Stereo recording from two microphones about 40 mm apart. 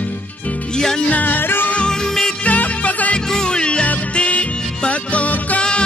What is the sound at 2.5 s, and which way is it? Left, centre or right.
Music, left.